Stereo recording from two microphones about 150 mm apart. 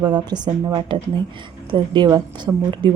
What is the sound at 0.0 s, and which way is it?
A woman's voice, 30° right (ahead or behind).